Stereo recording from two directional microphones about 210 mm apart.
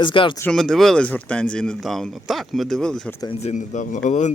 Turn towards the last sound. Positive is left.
turn(degrees=35)  # may be behind; listen again after turning